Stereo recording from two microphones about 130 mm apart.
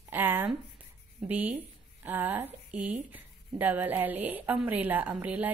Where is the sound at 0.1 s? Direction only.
15° right (ahead or behind).